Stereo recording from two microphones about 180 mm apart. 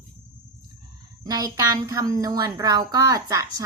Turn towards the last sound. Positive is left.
turn(degrees=-20)  # may be behind; listen again after turning